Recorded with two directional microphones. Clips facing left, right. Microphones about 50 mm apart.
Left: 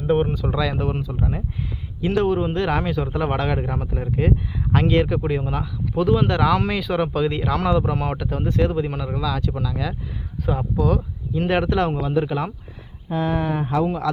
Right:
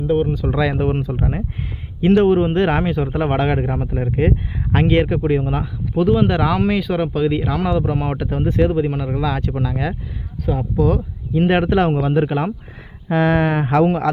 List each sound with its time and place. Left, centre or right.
0.1 s speech: centre
0.5 s a man's voice: right
5.9 s speech: centre
9.2 s a man's voice: right
10.8 s speech: centre
11.3 s speech: right
11.9 s speech: right
12.2 s a man's voice: right
13.1 s speech: right